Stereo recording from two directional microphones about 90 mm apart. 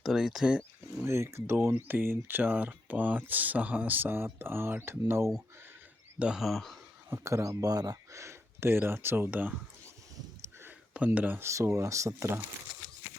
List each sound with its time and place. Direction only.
0.0 s speech: centre (ahead or behind)
1.0 s speech: 30° right (ahead or behind)
6.1 s speech: 10° right (ahead or behind)
6.4 s speech: centre (ahead or behind)
7.1 s speech: 35° right (ahead or behind)
10.4 s a sound: 25° right (ahead or behind)
10.9 s speech: 15° right (ahead or behind)